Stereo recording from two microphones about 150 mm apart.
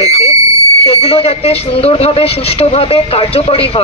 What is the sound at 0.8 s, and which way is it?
Speech, 40° left (ahead or behind).